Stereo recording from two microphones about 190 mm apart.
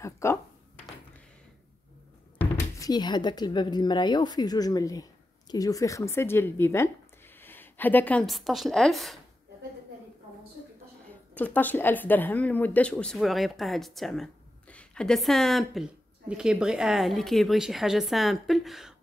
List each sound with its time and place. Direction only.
0.0 s a sound: 15° left (ahead or behind)
2.8 s speech: 20° left (ahead or behind); by 9.2 s centre (ahead or behind)
11.3 s speech: 10° left (ahead or behind)